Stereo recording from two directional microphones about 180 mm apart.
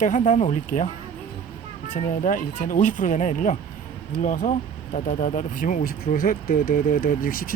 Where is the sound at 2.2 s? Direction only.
45° left (ahead or behind).